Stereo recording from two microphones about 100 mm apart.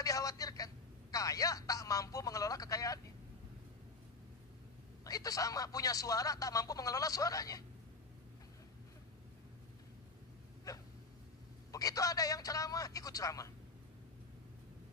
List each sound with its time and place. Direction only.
0.0 s telephone: 35° left (ahead or behind)
1.1 s speech: 35° left (ahead or behind)
5.0 s speech: 35° left (ahead or behind)
10.7 s a sound: 35° left (ahead or behind)
11.7 s speech: 35° left (ahead or behind)